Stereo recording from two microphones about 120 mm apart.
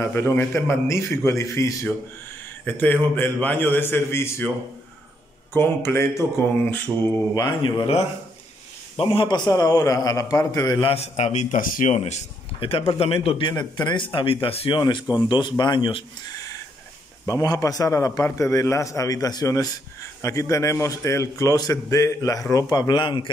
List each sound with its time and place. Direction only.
0.0 s a man's voice: 20° left (ahead or behind)
2.6 s speech: 15° left (ahead or behind)
5.5 s a man's voice: 20° left (ahead or behind)
7.3 s a man's voice: 35° left (ahead or behind)
10.9 s a man's voice: 65° left (ahead or behind); by 12.0 s 85° left
12.0 s a man's voice: 70° left (ahead or behind)
12.5 s a man's voice: 50° left (ahead or behind)
14.8 s a man's voice: 40° left (ahead or behind)
17.3 s a man's voice: 30° left (ahead or behind)